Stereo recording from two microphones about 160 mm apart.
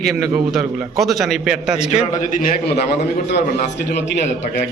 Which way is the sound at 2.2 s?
60° left (ahead or behind).